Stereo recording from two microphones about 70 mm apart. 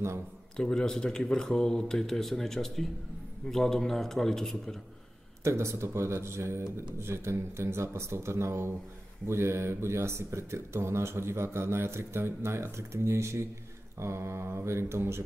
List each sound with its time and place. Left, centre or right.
0.6 s a man's voice: centre
5.4 s speech: right